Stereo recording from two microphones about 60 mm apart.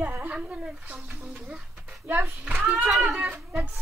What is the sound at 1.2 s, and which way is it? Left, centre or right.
Speech, centre.